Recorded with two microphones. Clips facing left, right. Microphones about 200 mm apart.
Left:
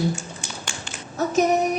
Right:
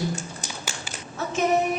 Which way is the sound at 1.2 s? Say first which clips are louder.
Left 3 dB; 40° left (ahead or behind).